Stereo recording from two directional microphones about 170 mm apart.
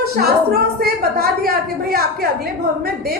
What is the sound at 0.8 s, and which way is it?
A woman's voice, 60° right (ahead or behind).